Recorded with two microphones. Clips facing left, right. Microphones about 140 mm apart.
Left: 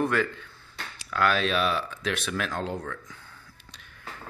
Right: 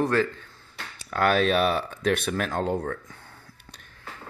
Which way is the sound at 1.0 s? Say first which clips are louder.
Right 3 dB; 50° right (ahead or behind).